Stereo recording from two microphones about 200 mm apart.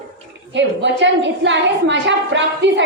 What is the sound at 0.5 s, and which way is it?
A woman's voice, 65° right (ahead or behind).